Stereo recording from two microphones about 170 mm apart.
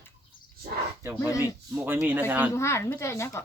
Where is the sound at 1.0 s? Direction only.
10° right (ahead or behind).